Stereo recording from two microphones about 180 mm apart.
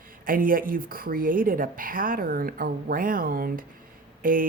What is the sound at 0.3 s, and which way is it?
Speech, 50° right (ahead or behind).